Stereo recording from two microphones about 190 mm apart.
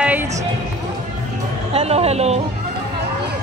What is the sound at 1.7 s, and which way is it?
Speech, 30° right (ahead or behind).